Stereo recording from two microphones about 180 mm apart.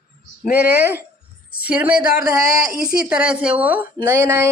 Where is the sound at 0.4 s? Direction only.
60° left (ahead or behind).